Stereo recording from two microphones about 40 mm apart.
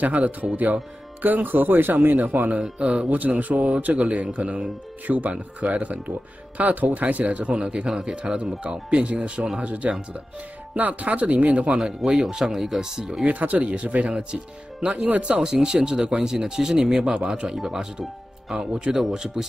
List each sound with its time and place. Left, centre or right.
0.0 s speech: right
2.8 s speech: right
5.0 s speech: right
7.6 s speech: right
12.1 s speech: right
12.4 s speech: centre
13.3 s speech: right; by 17.6 s centre
17.6 s speech: centre
18.6 s speech: centre